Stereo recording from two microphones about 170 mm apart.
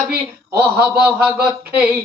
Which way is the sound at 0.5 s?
10° right (ahead or behind).